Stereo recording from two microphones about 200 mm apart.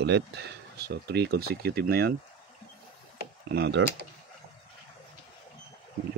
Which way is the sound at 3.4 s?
55° right (ahead or behind).